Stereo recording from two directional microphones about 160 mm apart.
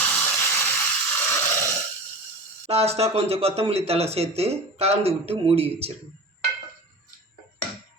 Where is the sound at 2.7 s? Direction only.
40° right (ahead or behind).